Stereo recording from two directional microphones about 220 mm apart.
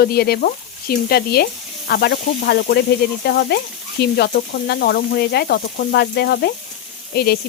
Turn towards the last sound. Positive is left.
turn(degrees=45)  # may be behind; listen again after turning